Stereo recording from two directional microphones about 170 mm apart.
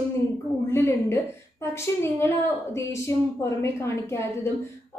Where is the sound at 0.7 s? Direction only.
15° left (ahead or behind).